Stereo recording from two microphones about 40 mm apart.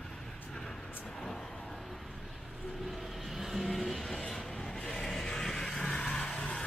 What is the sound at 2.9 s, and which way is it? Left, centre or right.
Vehicle, centre.